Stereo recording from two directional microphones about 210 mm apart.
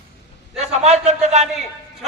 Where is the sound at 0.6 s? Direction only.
30° right (ahead or behind).